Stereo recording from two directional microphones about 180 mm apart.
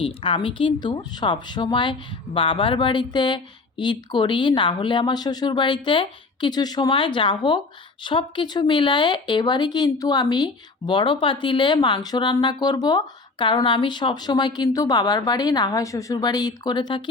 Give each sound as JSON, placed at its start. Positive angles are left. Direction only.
{"t": 0.0, "sound": "speech", "side_deg": 30}